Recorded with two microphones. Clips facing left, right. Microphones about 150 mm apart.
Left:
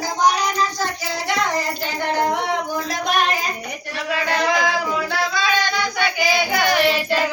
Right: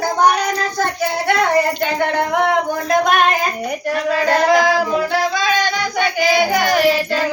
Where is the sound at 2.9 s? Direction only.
55° right (ahead or behind).